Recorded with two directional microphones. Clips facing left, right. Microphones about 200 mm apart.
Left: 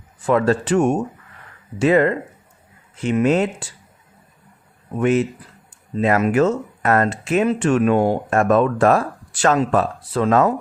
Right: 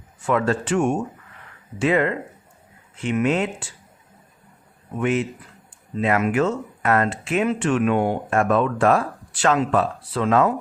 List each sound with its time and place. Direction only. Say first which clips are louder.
0.3 s speech: left 4 dB; 35° left (ahead or behind)
4.9 s speech: left 4 dB; 40° left (ahead or behind)